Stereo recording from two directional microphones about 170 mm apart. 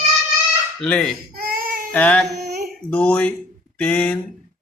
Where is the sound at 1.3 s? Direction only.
60° right (ahead or behind).